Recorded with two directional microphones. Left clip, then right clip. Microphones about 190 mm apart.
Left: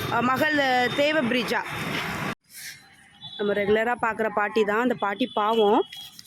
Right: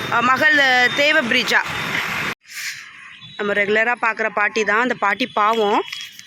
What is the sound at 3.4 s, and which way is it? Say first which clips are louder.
Speech: right 5 dB; 10° left (ahead or behind).